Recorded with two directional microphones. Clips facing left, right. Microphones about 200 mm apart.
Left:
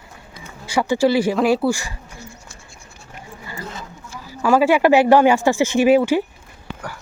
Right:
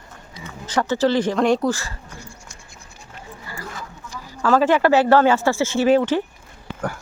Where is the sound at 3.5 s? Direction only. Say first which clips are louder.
Left 2 dB; 25° left (ahead or behind).